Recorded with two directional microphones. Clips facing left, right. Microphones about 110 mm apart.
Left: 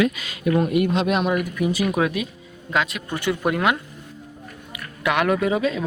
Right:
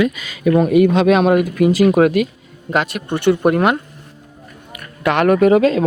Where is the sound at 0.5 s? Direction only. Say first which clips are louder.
Right 7 dB; 80° right.